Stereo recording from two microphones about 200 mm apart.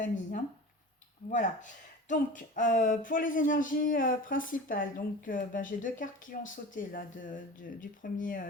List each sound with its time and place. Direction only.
0.0 s speech: 40° left (ahead or behind)